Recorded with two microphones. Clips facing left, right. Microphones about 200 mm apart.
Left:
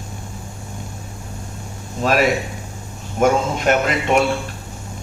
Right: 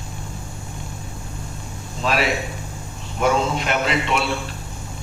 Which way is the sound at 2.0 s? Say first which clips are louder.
Left 5 dB; 45° left (ahead or behind).